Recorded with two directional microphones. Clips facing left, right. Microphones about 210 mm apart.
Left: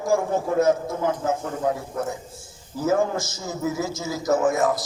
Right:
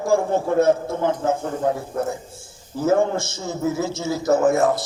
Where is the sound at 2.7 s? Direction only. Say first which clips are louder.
Right 3 dB; 30° right (ahead or behind).